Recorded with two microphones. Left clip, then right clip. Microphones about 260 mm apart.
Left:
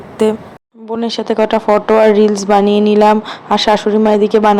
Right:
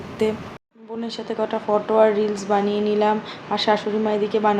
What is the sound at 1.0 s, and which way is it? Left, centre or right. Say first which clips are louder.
A woman's voice: left 12 dB; left.